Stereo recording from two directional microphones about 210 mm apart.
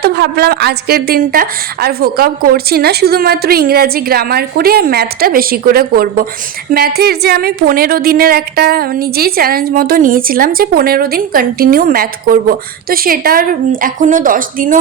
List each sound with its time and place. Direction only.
0.0 s a woman's voice: 50° right (ahead or behind)